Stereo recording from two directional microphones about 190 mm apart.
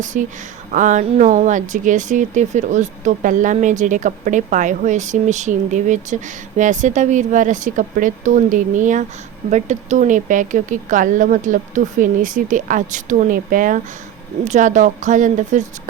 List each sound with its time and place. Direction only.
0.0 s speech: 40° right (ahead or behind)